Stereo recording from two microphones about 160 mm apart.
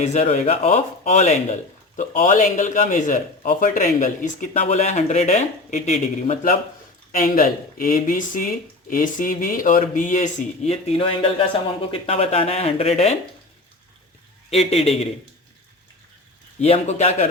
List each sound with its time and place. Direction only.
0.0 s a man's voice: 45° left (ahead or behind)
14.5 s speech: 40° left (ahead or behind)
16.6 s a man's voice: 40° left (ahead or behind)